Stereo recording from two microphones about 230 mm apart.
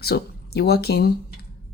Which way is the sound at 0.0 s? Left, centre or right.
Left.